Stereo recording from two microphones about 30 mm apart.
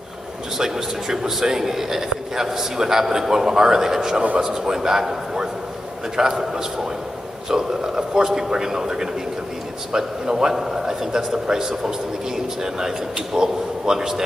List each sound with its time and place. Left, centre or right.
0.6 s a man's voice: centre